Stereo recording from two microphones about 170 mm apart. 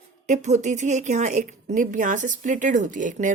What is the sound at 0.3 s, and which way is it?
A woman's voice, 45° right (ahead or behind).